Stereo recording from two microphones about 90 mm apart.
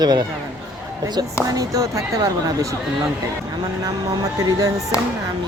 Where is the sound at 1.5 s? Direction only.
40° right (ahead or behind).